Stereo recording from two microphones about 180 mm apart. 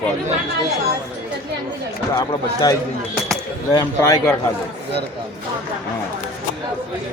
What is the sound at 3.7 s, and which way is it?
Speech, 15° left (ahead or behind).